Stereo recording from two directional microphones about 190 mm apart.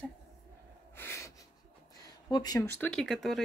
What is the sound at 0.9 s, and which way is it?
Snort, 10° left (ahead or behind).